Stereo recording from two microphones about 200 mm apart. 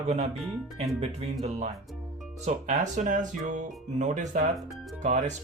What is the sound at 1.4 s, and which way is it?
Speech, 35° right (ahead or behind).